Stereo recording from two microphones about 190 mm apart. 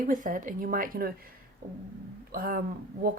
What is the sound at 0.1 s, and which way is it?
Speech, 45° right (ahead or behind).